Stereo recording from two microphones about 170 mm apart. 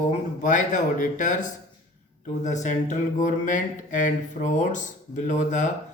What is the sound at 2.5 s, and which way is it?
A man's voice, 45° left (ahead or behind).